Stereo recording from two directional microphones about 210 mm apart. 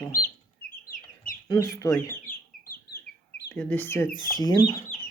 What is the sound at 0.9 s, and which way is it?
Chicken, 40° left (ahead or behind).